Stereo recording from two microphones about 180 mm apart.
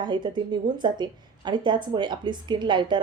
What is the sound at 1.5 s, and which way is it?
A woman's voice, 25° right (ahead or behind).